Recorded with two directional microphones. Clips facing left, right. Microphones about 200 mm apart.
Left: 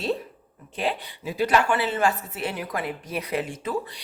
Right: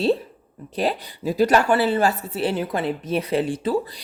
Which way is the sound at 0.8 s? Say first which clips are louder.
Right 4 dB; 40° right (ahead or behind).